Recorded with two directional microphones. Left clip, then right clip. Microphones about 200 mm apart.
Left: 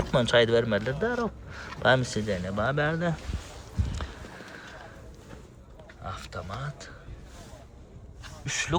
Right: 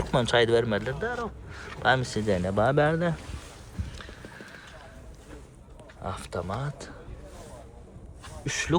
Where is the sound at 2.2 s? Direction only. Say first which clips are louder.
Right 4 dB; 5° left (ahead or behind).